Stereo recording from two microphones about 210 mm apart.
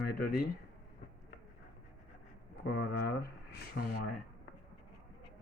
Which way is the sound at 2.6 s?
50° left (ahead or behind).